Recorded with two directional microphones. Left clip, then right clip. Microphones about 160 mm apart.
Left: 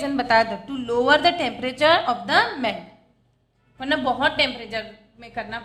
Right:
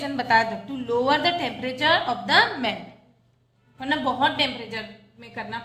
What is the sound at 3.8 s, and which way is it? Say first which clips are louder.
A woman's voice: left 1 dB; 40° left (ahead or behind).